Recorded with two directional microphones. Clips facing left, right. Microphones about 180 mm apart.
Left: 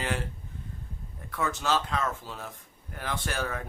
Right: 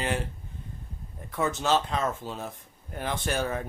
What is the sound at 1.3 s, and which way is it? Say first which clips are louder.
Speech: right 3 dB; 25° right (ahead or behind).